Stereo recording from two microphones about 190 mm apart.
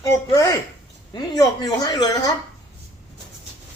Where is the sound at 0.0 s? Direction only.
15° left (ahead or behind).